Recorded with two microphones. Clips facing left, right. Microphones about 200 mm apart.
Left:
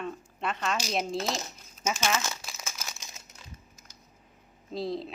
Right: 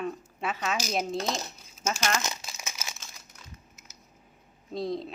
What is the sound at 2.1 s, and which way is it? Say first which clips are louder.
Crumpling: even; 20° right (ahead or behind).